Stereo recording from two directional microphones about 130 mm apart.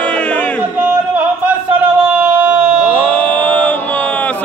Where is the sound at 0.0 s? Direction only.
10° left (ahead or behind).